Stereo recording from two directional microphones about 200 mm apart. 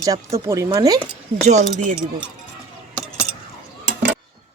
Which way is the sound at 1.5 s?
35° right (ahead or behind).